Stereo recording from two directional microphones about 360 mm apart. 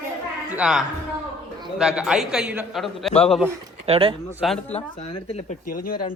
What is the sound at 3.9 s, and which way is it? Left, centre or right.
Speech, centre.